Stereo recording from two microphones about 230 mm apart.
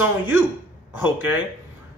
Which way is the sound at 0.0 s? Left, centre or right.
Centre.